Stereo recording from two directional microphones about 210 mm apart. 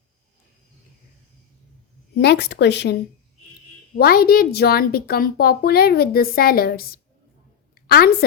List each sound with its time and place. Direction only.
2.1 s a woman's voice: 50° left (ahead or behind)